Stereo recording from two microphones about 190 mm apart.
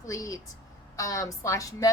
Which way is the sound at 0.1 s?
20° left (ahead or behind).